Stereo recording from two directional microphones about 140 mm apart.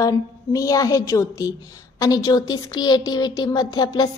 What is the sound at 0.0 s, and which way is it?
A woman's voice, 25° left (ahead or behind).